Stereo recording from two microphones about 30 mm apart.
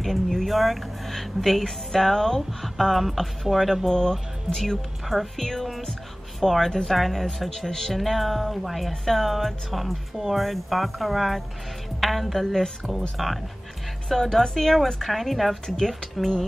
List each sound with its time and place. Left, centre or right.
0.5 s a woman's voice: centre
12.5 s speech: centre
13.2 s speech: centre
14.0 s speech: centre